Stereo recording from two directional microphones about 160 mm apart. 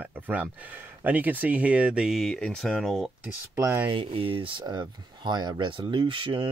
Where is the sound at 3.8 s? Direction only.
30° right (ahead or behind).